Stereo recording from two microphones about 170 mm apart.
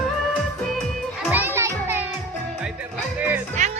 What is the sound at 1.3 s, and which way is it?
Music, 10° right (ahead or behind).